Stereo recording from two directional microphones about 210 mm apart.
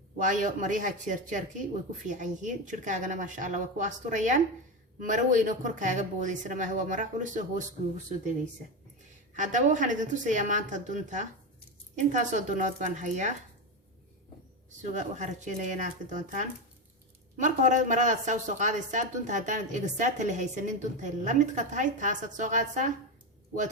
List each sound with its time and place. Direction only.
0.2 s speech: 35° right (ahead or behind)
9.3 s speech: 35° right (ahead or behind)
14.8 s speech: 35° right (ahead or behind)